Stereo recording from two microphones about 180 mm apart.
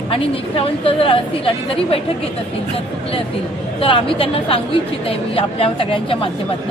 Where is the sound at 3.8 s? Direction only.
30° left (ahead or behind).